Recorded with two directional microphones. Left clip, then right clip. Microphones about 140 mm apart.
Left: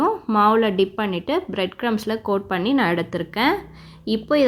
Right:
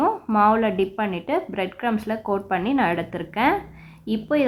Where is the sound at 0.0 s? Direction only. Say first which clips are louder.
Left 1 dB; 30° left (ahead or behind).